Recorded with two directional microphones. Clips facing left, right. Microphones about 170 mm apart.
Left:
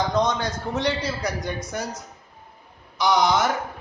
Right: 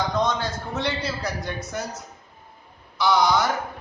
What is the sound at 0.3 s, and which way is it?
A man's voice, 15° left (ahead or behind).